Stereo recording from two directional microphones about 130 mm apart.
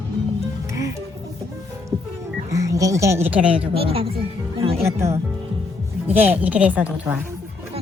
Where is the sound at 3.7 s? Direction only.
45° right (ahead or behind).